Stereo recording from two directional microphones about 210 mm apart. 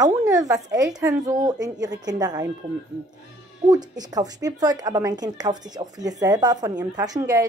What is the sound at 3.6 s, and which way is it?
A woman's voice, 20° right (ahead or behind).